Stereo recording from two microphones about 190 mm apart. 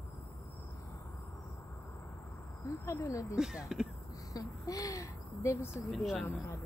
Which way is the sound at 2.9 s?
15° left (ahead or behind).